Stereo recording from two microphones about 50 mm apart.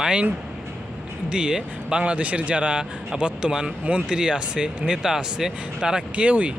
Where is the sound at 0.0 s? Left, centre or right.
Centre.